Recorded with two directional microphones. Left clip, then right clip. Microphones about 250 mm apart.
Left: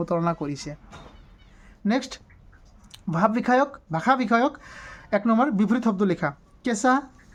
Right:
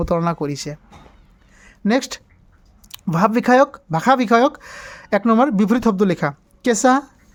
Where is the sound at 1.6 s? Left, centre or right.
Right.